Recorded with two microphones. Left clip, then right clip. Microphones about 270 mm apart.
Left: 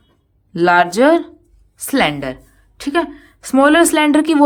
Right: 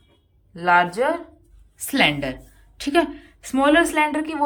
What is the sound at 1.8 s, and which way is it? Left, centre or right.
A woman's voice, centre.